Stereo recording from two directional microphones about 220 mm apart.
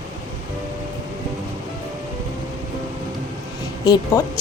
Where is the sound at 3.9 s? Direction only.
15° left (ahead or behind).